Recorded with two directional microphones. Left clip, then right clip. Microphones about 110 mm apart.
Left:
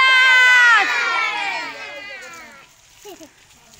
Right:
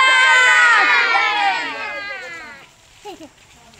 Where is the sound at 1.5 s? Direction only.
25° left (ahead or behind).